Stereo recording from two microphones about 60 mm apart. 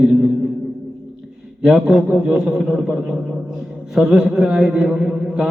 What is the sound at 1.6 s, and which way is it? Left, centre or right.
A man's voice, centre.